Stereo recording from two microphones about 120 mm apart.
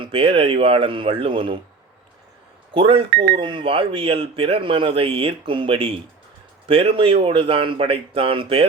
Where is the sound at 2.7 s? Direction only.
50° right (ahead or behind).